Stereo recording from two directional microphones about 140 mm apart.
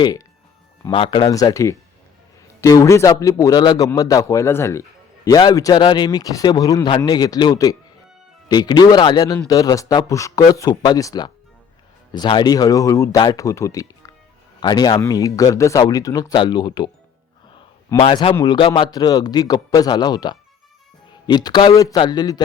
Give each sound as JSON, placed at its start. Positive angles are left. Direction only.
{"t": 0.8, "sound": "speech", "side_deg": 40}
{"t": 1.3, "sound": "a man's voice", "side_deg": 25}
{"t": 18.0, "sound": "a man's voice", "side_deg": 40}